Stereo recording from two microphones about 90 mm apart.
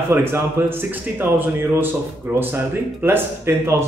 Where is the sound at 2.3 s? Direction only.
25° right (ahead or behind).